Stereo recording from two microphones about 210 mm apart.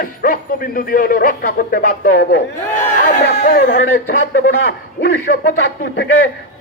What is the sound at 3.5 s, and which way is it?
Speech, 55° left (ahead or behind).